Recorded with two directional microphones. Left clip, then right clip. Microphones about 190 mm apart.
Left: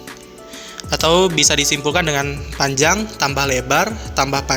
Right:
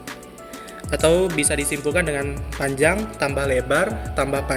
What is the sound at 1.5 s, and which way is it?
A man's voice, 45° left (ahead or behind).